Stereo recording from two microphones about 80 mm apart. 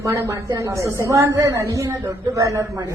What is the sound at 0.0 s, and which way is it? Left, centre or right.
Speech, right.